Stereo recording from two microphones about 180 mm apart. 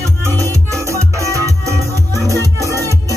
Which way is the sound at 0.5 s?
15° right (ahead or behind).